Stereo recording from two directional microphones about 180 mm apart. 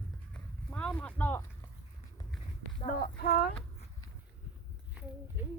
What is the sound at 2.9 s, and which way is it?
Speech, 55° left (ahead or behind).